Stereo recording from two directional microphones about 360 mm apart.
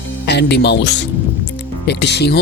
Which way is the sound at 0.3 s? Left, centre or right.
Left.